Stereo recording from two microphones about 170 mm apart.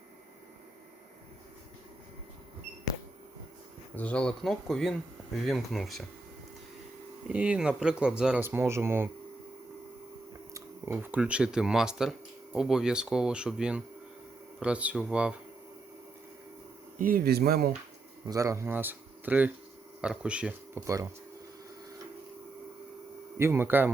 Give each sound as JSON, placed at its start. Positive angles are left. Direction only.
{"t": 3.9, "sound": "speech", "side_deg": 5}
{"t": 7.3, "sound": "speech", "side_deg": -5}
{"t": 10.5, "sound": "speech", "side_deg": -15}
{"t": 17.0, "sound": "speech", "side_deg": -60}
{"t": 18.3, "sound": "speech", "side_deg": -20}
{"t": 20.8, "sound": "speech", "side_deg": -20}
{"t": 23.4, "sound": "speech", "side_deg": -15}